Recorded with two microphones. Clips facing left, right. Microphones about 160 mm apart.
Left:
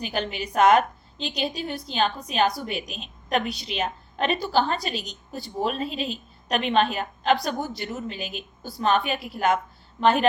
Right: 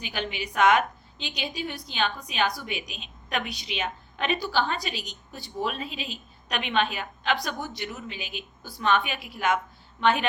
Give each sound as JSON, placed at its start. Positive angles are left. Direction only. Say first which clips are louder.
{"t": 0.0, "sound": "a woman's voice", "louder": "left 4 dB", "side_deg": 40}